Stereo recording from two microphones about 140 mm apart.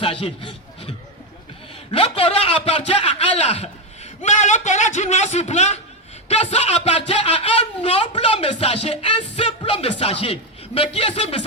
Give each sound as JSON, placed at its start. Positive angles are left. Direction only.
{"t": 0.0, "sound": "a man's voice", "side_deg": 40}